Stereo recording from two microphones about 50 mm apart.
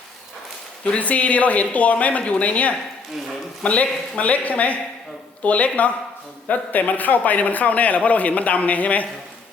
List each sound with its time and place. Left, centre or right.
0.9 s a man's voice: left